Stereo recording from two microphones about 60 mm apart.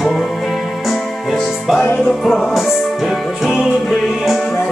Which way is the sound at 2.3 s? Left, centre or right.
Centre.